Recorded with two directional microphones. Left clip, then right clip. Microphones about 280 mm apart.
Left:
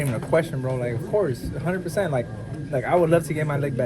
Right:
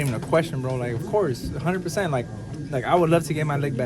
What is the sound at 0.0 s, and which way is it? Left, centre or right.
Speech, centre.